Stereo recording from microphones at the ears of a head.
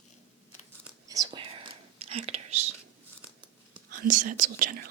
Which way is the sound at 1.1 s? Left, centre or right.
Right.